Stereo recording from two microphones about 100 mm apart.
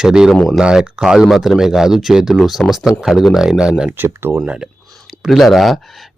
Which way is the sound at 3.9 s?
20° right (ahead or behind).